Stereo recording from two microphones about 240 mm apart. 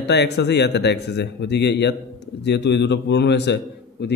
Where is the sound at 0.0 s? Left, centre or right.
Left.